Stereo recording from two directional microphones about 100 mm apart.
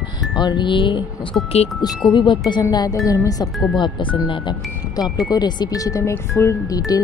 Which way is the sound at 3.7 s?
50° left (ahead or behind).